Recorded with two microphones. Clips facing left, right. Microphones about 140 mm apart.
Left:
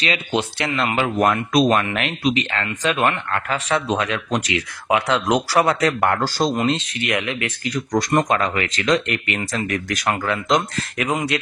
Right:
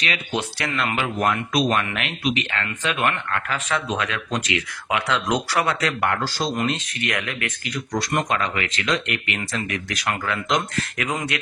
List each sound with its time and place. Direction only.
0.0 s speech: 25° left (ahead or behind)
0.9 s speech: 45° left (ahead or behind)
6.5 s speech: 25° left (ahead or behind)
7.6 s speech: 40° left (ahead or behind)